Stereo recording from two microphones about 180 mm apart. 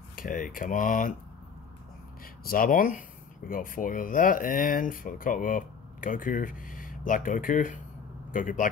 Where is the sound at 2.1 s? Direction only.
55° left (ahead or behind).